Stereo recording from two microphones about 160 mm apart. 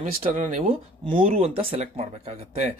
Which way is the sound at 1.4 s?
35° right (ahead or behind).